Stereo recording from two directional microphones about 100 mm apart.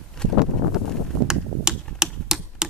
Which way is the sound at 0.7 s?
5° right (ahead or behind).